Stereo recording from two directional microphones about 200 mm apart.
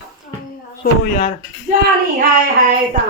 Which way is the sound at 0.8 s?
45° left (ahead or behind).